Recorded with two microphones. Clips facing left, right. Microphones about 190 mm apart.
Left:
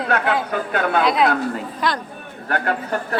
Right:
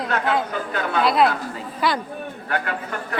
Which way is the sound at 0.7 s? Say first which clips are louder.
Left 4 dB; 55° left (ahead or behind).